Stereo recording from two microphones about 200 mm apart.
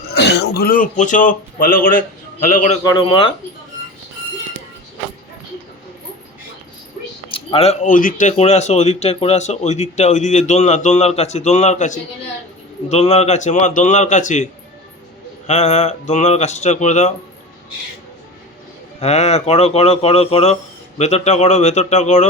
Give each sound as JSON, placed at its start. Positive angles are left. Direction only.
{"t": 0.2, "sound": "speech", "side_deg": 55}
{"t": 2.8, "sound": "speech", "side_deg": 25}
{"t": 7.3, "sound": "speech", "side_deg": 25}
{"t": 15.4, "sound": "speech", "side_deg": 35}
{"t": 18.9, "sound": "speech", "side_deg": 35}